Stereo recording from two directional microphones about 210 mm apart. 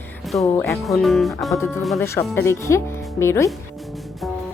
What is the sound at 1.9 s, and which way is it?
Speech, 10° left (ahead or behind).